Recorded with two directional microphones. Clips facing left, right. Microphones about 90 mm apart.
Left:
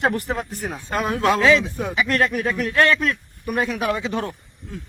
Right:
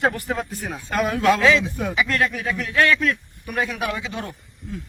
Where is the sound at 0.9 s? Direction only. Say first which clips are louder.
Right 1 dB; 25° left (ahead or behind).